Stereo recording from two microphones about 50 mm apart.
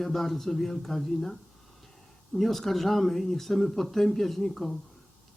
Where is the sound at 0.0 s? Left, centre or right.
Centre.